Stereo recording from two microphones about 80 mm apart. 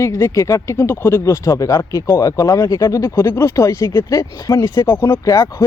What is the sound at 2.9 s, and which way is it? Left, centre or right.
Speech, left.